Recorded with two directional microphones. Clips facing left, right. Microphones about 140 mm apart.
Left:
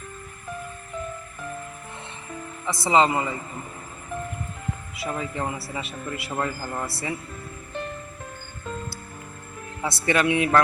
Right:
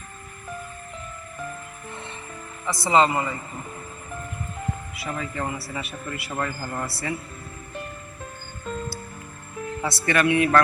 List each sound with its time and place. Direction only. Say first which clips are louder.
2.6 s speech: even; 20° left (ahead or behind)
5.0 s a man's voice: left 1 dB; 20° left (ahead or behind)
9.8 s speech: even; 20° left (ahead or behind)